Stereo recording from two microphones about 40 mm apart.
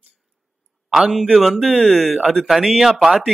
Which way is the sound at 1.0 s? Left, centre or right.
Centre.